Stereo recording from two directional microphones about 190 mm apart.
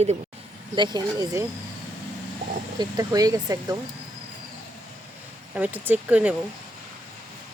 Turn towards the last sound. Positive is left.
turn(degrees=-10)  # may be behind; listen again after turning